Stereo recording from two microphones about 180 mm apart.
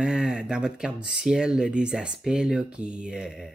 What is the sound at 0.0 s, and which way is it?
Speech, 5° right (ahead or behind).